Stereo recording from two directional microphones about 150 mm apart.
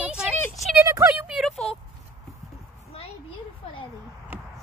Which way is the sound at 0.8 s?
20° right (ahead or behind).